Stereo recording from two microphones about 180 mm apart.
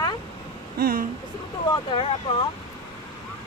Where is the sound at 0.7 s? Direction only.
60° right (ahead or behind).